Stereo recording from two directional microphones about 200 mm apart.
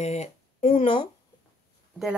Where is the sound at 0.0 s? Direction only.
35° left (ahead or behind).